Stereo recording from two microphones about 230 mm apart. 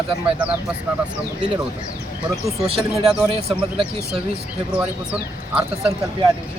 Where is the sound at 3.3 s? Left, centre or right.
Right.